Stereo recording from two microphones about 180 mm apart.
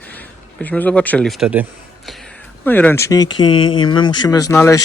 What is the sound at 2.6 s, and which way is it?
Speech, 10° left (ahead or behind).